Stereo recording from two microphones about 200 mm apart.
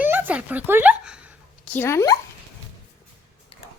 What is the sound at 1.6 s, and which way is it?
Speech, 10° left (ahead or behind).